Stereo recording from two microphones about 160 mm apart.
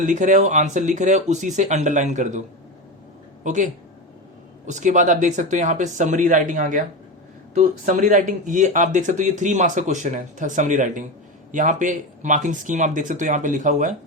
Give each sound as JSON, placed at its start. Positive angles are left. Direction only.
{"t": 0.0, "sound": "speech", "side_deg": -50}
{"t": 3.4, "sound": "speech", "side_deg": -50}